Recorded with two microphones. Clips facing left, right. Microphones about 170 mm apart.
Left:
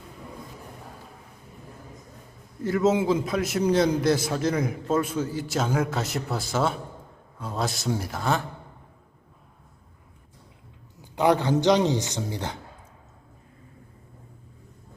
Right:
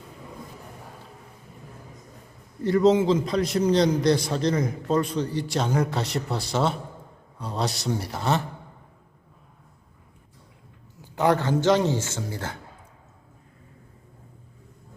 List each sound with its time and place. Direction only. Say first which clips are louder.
2.6 s a man's voice: right 3 dB; centre (ahead or behind)
11.0 s a man's voice: left 1 dB; 15° left (ahead or behind)